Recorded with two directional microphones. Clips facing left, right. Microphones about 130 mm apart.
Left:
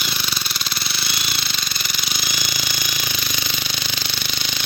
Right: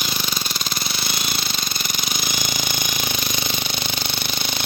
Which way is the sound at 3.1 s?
50° right (ahead or behind).